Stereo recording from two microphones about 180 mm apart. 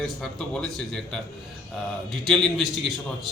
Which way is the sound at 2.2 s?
Centre (ahead or behind).